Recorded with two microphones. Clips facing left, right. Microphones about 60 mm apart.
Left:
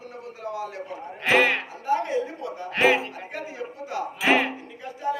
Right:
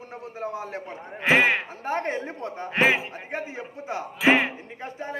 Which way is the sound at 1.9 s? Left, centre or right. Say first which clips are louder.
Left 4 dB; right.